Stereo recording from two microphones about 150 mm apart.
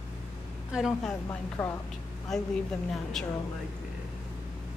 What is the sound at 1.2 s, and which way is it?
Speech, 15° left (ahead or behind).